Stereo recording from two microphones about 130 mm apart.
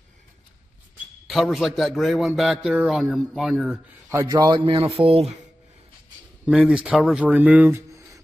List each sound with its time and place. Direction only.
1.2 s a man's voice: centre (ahead or behind)
4.1 s a man's voice: 20° right (ahead or behind)
4.4 s speech: 35° right (ahead or behind)
6.4 s speech: 5° right (ahead or behind)